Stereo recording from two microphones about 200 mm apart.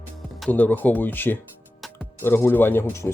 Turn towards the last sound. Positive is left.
turn(degrees=10)  # may be behind; listen again after turning